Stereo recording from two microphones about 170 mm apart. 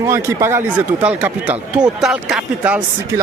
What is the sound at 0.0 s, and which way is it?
Speech, 15° right (ahead or behind).